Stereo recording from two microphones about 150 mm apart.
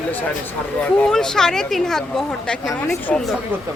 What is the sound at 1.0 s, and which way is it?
Speech, 5° left (ahead or behind).